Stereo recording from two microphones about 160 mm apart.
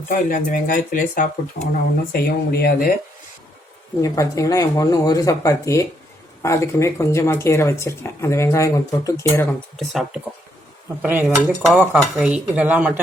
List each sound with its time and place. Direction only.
0.1 s speech: 60° left (ahead or behind)
2.1 s speech: 70° left (ahead or behind)
4.0 s speech: 20° left (ahead or behind)
9.7 s speech: centre (ahead or behind)
11.0 s dishes: 10° right (ahead or behind)